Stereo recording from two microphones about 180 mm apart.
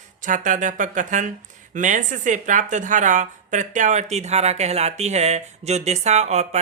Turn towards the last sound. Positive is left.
turn(degrees=-40)  # may be behind; listen again after turning